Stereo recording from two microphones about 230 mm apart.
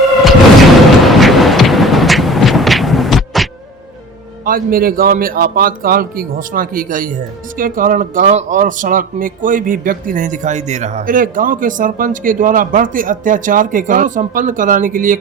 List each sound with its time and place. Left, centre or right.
1.0 s vehicle: centre
4.4 s a man's voice: right